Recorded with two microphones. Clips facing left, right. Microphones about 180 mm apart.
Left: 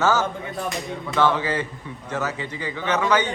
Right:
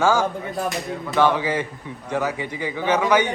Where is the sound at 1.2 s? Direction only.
15° right (ahead or behind).